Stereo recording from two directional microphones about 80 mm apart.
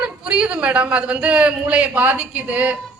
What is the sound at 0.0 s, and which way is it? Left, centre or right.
A man's voice, centre.